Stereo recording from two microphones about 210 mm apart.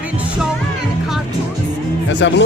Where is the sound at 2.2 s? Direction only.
60° left (ahead or behind).